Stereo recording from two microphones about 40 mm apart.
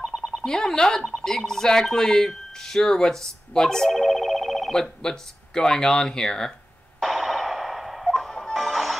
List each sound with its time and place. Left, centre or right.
0.0 s a sound: centre
0.5 s speech: centre
4.7 s speech: centre
7.0 s a sound: centre
8.3 s music: centre
8.5 s music: centre